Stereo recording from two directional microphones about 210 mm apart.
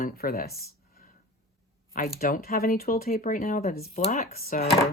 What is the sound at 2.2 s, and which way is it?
Speech, 45° left (ahead or behind).